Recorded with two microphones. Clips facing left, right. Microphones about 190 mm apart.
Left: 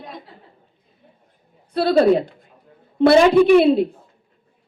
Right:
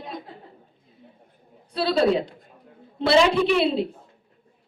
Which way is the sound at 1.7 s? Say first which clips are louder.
Left 6 dB; 50° left (ahead or behind).